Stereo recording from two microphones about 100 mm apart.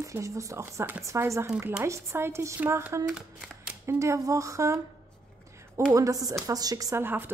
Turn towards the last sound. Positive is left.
turn(degrees=-20)  # may be behind; listen again after turning